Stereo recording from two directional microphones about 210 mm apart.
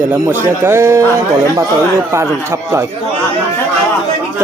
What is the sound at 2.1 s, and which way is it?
Speech, 15° right (ahead or behind).